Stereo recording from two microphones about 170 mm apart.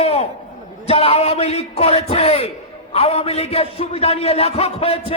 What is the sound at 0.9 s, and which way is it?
A man's voice, 35° left (ahead or behind).